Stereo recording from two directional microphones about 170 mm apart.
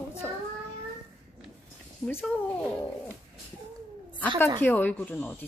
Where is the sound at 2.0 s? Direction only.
10° left (ahead or behind).